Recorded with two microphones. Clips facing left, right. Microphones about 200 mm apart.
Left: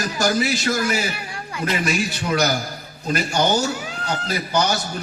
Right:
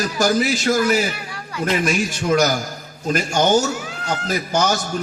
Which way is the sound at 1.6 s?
45° right (ahead or behind).